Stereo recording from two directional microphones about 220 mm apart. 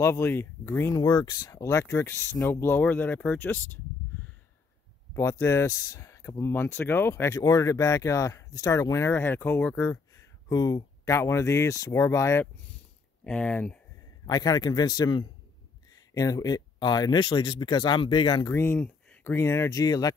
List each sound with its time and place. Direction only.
0.0 s speech: 10° left (ahead or behind)
5.1 s speech: 15° left (ahead or behind)
14.2 s a man's voice: 15° left (ahead or behind)